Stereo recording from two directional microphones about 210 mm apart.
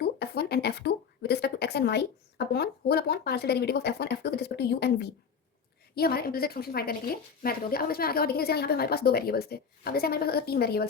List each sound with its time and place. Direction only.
0.0 s a woman's voice: 50° left (ahead or behind)